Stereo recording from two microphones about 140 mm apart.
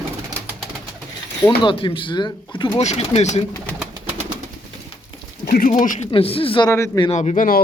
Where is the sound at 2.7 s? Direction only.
50° left (ahead or behind).